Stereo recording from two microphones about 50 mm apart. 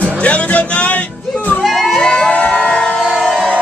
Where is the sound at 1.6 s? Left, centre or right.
Centre.